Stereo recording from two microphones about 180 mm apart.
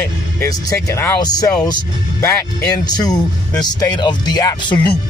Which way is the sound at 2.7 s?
20° left (ahead or behind).